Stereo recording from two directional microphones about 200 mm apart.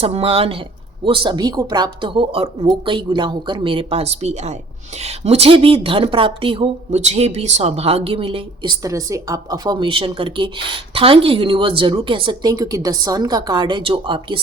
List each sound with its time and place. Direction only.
0.0 s a woman's voice: 30° right (ahead or behind)